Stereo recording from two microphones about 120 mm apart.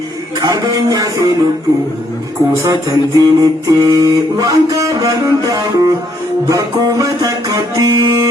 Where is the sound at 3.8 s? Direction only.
30° right (ahead or behind).